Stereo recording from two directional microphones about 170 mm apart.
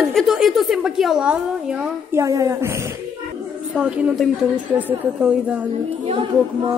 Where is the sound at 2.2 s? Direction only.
20° right (ahead or behind).